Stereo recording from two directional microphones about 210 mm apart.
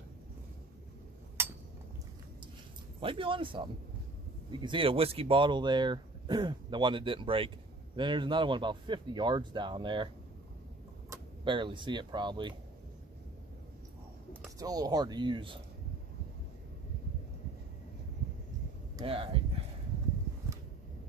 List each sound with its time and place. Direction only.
1.4 s a sound: 10° right (ahead or behind)
3.0 s speech: 25° right (ahead or behind)
11.1 s speech: 25° right (ahead or behind)
14.6 s speech: 20° right (ahead or behind)
18.9 s speech: 25° right (ahead or behind)